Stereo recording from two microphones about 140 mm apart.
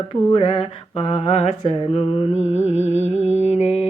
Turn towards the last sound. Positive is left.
turn(degrees=50)  # may be behind; listen again after turning